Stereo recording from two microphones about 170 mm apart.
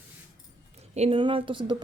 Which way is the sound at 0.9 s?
35° right (ahead or behind).